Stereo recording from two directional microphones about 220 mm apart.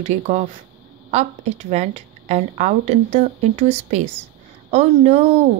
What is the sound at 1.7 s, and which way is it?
A woman's voice, 30° right (ahead or behind).